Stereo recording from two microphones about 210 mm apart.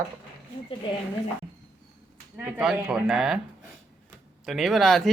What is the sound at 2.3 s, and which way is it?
Speech, 5° right (ahead or behind).